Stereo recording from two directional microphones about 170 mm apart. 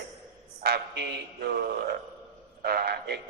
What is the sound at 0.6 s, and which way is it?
A man's voice, 70° right (ahead or behind).